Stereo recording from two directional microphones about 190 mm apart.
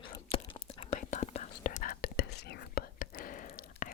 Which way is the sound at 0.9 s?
40° left (ahead or behind).